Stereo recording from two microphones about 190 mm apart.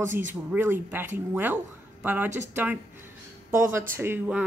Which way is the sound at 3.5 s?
15° right (ahead or behind).